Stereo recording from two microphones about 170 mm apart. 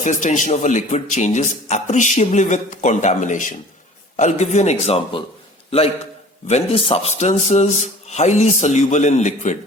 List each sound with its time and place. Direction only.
0.0 s a man's voice: 45° left (ahead or behind)
6.5 s a man's voice: 35° left (ahead or behind)